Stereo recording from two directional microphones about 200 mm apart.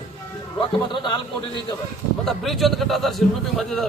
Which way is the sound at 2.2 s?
Centre (ahead or behind).